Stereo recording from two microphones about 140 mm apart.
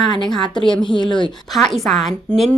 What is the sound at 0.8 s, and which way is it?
Speech, 35° left (ahead or behind).